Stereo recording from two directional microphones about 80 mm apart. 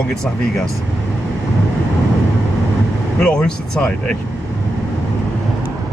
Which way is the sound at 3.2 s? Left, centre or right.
Centre.